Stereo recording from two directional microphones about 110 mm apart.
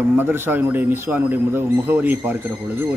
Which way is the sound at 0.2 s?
15° right (ahead or behind).